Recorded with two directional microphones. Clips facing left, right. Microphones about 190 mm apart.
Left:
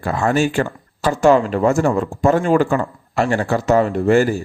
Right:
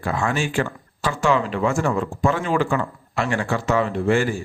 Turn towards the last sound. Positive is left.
turn(degrees=40)  # may be behind; listen again after turning